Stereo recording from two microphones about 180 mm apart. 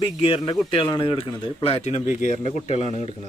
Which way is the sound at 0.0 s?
30° left (ahead or behind).